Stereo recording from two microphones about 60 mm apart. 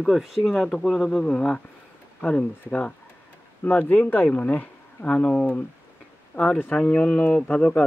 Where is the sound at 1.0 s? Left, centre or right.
Centre.